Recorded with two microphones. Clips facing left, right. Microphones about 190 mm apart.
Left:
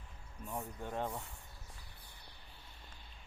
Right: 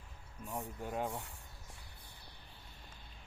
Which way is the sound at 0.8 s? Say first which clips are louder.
Right 1 dB; 10° right (ahead or behind).